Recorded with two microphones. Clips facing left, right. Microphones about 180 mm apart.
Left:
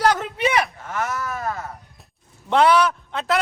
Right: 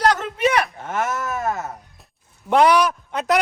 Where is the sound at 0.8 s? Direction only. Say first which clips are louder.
Right 2 dB; 25° right (ahead or behind).